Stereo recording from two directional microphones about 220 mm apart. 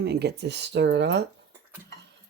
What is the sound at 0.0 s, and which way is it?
Speech, 50° right (ahead or behind).